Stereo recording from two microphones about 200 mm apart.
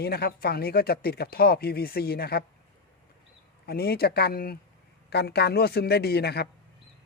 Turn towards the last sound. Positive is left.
turn(degrees=55)  # may be behind; listen again after turning